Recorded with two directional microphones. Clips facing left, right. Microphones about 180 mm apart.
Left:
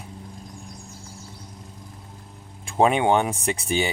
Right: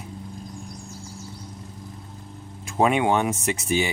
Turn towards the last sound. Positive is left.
turn(degrees=30)  # may be behind; listen again after turning